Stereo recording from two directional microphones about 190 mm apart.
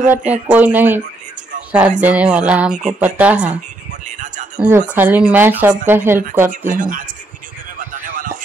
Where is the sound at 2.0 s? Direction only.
10° right (ahead or behind).